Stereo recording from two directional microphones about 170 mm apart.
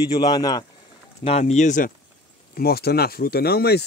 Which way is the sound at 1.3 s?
40° left (ahead or behind).